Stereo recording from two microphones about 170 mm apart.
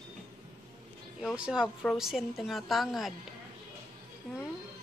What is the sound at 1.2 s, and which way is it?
A woman's voice, 5° right (ahead or behind).